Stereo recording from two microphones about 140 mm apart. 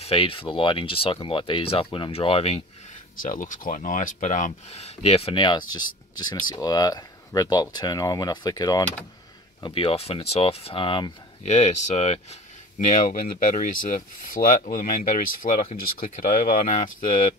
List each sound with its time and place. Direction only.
0.0 s speech: 40° left (ahead or behind)
3.2 s speech: 70° left (ahead or behind); by 11.1 s 35° left (ahead or behind)
11.4 s speech: 55° left (ahead or behind)
13.1 s speech: 85° left